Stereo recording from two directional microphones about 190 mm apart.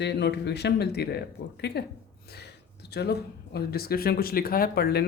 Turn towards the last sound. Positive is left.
turn(degrees=55)  # may be behind; listen again after turning